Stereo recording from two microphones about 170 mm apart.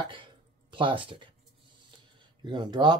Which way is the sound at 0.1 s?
30° right (ahead or behind).